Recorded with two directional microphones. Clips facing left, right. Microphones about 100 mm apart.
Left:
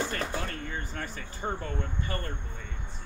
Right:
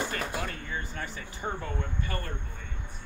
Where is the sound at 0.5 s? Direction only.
50° left (ahead or behind).